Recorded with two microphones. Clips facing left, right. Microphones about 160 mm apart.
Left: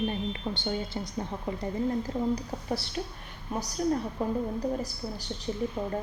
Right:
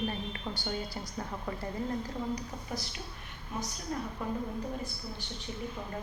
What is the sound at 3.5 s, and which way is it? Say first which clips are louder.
Speech: left 8 dB; 40° left (ahead or behind).